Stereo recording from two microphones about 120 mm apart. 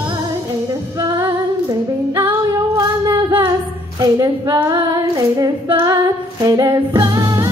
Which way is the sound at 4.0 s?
30° right (ahead or behind).